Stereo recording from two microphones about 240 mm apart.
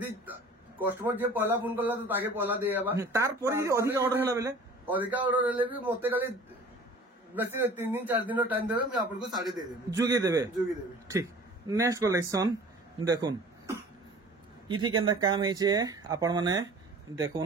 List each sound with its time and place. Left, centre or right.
0.7 s speech: centre
7.3 s speech: centre
11.7 s speech: centre